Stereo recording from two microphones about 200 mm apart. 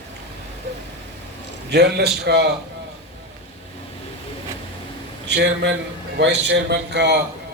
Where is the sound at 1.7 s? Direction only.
55° right (ahead or behind).